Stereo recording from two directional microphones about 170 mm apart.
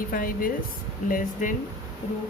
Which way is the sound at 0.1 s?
55° left (ahead or behind).